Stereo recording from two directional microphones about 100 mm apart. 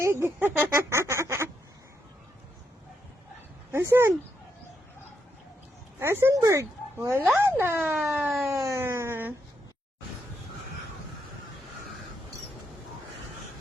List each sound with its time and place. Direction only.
0.0 s speech: 25° right (ahead or behind)
3.7 s speech: 25° right (ahead or behind)
6.0 s speech: 25° right (ahead or behind)
8.4 s a sound: 30° right (ahead or behind)